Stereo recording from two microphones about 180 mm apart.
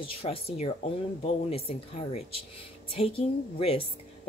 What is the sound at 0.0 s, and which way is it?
Speech, 30° left (ahead or behind).